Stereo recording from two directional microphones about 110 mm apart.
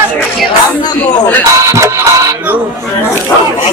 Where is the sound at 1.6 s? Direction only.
25° right (ahead or behind).